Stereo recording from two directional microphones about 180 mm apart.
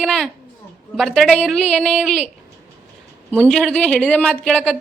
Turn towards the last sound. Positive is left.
turn(degrees=5)  # may be behind; listen again after turning